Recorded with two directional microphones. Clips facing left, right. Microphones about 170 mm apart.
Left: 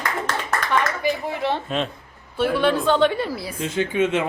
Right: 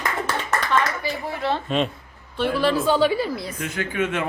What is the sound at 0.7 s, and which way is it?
Clapping, 15° left (ahead or behind).